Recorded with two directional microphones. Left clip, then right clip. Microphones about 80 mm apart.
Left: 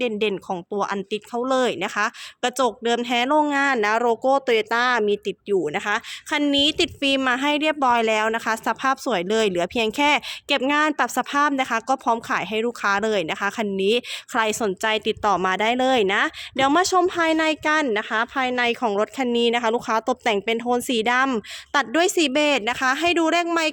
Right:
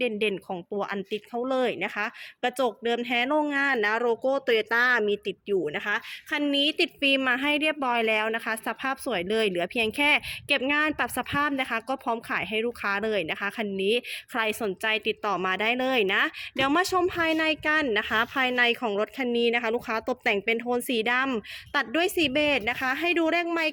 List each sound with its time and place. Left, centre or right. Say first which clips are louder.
0.0 s speech: left 4 dB; left
17.9 s a woman's voice: left 2 dB; centre; by 23.7 s left